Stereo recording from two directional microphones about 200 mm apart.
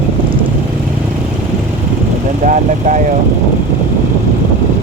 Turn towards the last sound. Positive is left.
turn(degrees=-40)  # may be behind; listen again after turning